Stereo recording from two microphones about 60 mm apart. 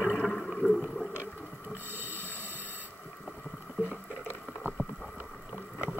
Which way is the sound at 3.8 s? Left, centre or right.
Right.